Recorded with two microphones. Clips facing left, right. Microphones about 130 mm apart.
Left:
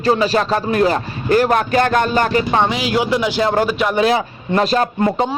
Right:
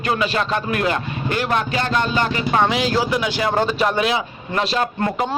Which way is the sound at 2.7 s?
10° left (ahead or behind).